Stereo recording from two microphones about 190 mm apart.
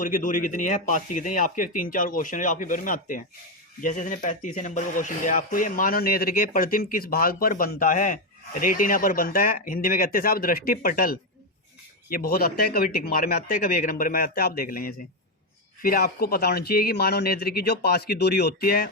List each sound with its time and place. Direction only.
0.0 s speech: 45° left (ahead or behind)